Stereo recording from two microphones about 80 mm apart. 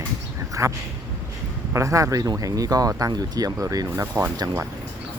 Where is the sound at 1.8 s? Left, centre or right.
Right.